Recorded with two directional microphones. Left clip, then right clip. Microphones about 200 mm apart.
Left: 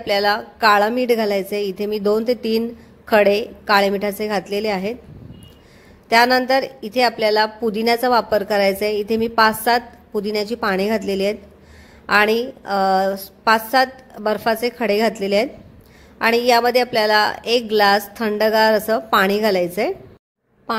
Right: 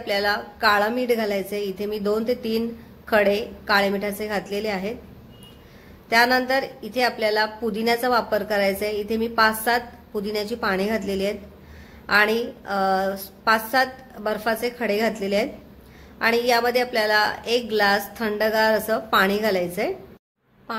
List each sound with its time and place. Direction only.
0.0 s speech: 40° left (ahead or behind)
6.0 s speech: 40° left (ahead or behind)